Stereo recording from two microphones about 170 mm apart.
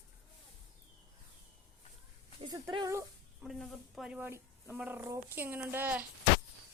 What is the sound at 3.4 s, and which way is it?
Speech, centre (ahead or behind).